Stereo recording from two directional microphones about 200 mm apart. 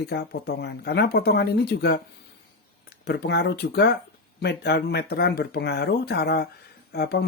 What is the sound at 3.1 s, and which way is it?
Speech, 55° left (ahead or behind).